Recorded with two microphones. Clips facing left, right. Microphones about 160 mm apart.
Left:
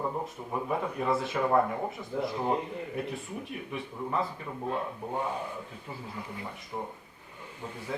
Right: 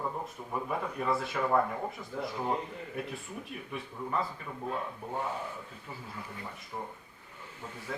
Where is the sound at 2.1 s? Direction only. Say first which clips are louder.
Left 6 dB; 25° left (ahead or behind).